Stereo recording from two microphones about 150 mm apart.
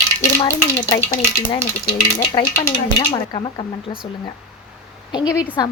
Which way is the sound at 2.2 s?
25° left (ahead or behind).